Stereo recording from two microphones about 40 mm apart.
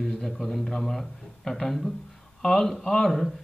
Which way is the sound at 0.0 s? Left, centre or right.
Centre.